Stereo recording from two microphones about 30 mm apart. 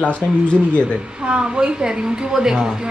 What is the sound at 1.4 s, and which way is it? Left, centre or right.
A woman's voice, right.